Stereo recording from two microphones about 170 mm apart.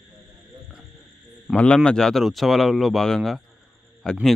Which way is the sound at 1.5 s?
5° left (ahead or behind).